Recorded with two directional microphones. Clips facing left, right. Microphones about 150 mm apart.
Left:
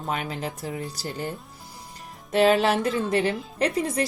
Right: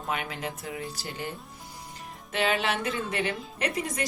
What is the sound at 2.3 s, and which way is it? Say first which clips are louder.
Speech: left 8 dB; 40° left (ahead or behind).